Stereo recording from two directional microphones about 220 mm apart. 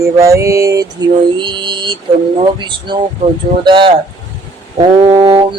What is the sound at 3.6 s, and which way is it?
Male singing, 20° right (ahead or behind).